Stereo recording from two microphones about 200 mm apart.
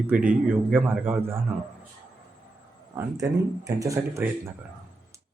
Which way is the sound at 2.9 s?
15° right (ahead or behind).